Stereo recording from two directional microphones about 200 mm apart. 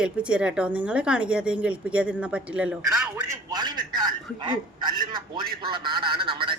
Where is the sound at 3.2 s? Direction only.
20° right (ahead or behind).